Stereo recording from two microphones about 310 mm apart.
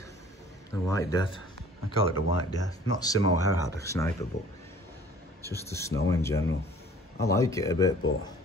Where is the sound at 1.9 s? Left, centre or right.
Left.